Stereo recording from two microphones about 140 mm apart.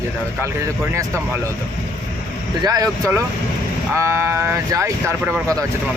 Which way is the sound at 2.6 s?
25° right (ahead or behind).